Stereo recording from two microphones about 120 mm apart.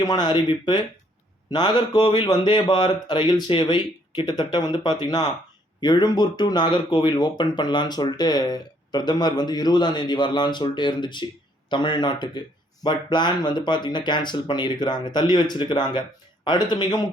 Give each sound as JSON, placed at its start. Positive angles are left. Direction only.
{"t": 0.0, "sound": "speech", "side_deg": 35}